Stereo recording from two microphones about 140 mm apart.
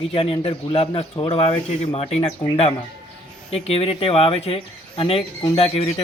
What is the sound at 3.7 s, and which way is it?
Speech, 45° left (ahead or behind).